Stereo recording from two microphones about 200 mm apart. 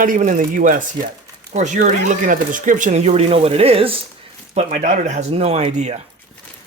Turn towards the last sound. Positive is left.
turn(degrees=-35)  # may be behind; listen again after turning